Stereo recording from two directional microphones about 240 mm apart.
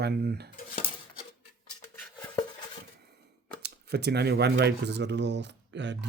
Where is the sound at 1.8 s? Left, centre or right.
Centre.